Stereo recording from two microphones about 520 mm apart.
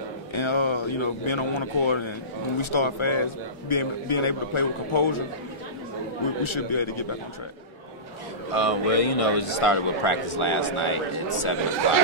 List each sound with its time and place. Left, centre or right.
0.3 s a man's voice: left
6.2 s a man's voice: left
8.5 s a man's voice: left